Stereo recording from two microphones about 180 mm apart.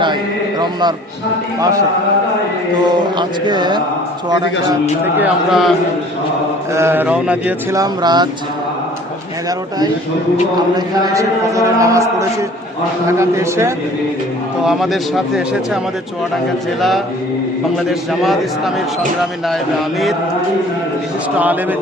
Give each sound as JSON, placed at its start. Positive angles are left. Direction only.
{"t": 0.6, "sound": "mantra", "side_deg": -25}
{"t": 2.8, "sound": "mantra", "side_deg": -25}
{"t": 5.1, "sound": "speech", "side_deg": -5}
{"t": 6.7, "sound": "a man's voice", "side_deg": -10}
{"t": 7.8, "sound": "mantra", "side_deg": -25}
{"t": 10.8, "sound": "a man's voice", "side_deg": -20}
{"t": 14.6, "sound": "speech", "side_deg": 0}
{"t": 17.8, "sound": "speech", "side_deg": 0}
{"t": 21.3, "sound": "a man's voice", "side_deg": -10}